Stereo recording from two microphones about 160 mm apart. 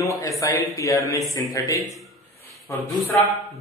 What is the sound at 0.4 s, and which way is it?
Speech, 20° left (ahead or behind).